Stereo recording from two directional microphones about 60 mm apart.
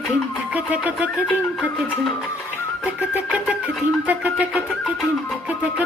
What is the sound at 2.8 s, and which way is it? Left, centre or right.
Flute, right.